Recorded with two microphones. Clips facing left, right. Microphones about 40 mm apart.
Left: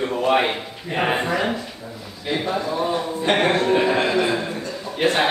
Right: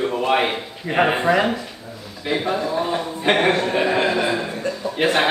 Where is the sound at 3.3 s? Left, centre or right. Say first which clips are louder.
Right 2 dB; right.